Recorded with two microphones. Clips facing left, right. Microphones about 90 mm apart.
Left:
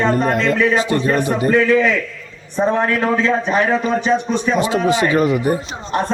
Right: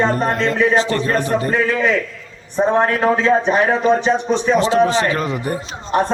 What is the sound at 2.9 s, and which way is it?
Speech, 35° right (ahead or behind).